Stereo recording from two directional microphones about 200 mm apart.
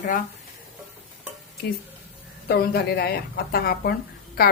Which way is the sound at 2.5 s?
50° left (ahead or behind).